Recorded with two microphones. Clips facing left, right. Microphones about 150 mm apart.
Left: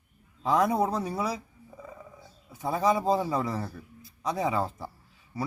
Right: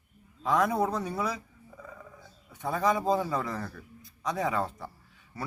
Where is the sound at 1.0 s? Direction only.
5° left (ahead or behind).